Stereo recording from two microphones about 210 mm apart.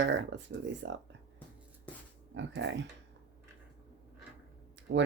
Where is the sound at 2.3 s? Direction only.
60° right (ahead or behind).